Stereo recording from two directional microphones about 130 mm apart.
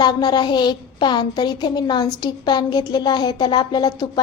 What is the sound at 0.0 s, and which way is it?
A woman's voice, 35° left (ahead or behind).